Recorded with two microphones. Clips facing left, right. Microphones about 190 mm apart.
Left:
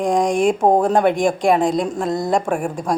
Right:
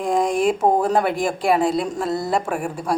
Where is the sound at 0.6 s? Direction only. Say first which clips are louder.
Left 5 dB; 45° left (ahead or behind).